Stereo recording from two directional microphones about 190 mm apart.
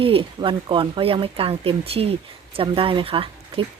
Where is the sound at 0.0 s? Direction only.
30° right (ahead or behind).